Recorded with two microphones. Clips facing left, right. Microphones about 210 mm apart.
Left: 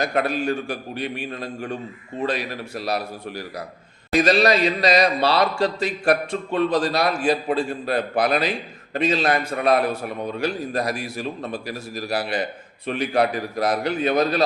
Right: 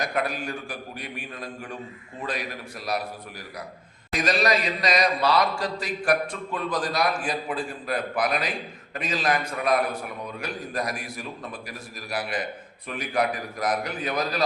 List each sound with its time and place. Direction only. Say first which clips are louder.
0.0 s a man's voice: left 6 dB; 25° left (ahead or behind)